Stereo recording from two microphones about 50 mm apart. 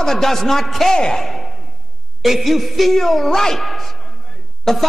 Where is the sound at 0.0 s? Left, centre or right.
Centre.